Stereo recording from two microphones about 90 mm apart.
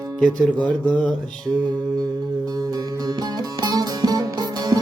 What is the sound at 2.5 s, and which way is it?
Music, 45° right (ahead or behind).